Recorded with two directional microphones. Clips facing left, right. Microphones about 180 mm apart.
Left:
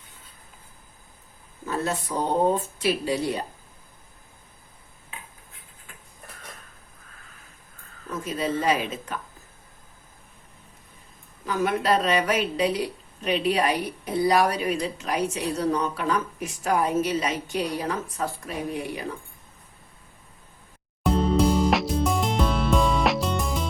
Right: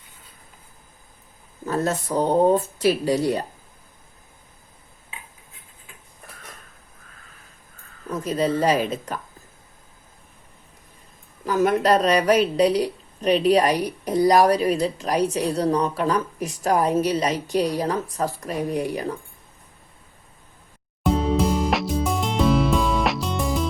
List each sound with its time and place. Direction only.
1.6 s a woman's voice: 40° right (ahead or behind)
8.2 s a woman's voice: 40° right (ahead or behind)
11.4 s a woman's voice: 40° right (ahead or behind)
21.0 s music: centre (ahead or behind)